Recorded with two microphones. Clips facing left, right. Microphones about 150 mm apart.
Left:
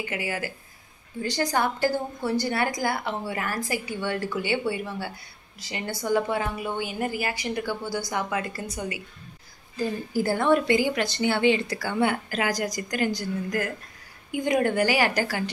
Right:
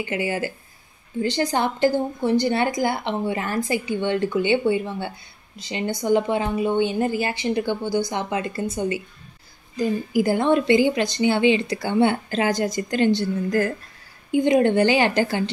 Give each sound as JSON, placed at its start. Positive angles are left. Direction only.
{"t": 0.0, "sound": "a woman's voice", "side_deg": -25}